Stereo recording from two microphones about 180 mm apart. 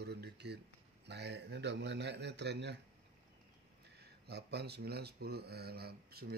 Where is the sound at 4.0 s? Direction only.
65° right (ahead or behind).